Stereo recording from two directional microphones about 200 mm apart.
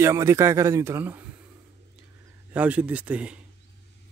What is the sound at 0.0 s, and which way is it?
A man's voice, 15° right (ahead or behind).